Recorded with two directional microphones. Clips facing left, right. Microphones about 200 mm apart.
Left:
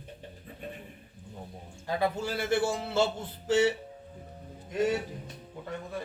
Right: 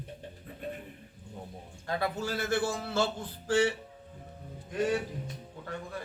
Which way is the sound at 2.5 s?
25° left (ahead or behind).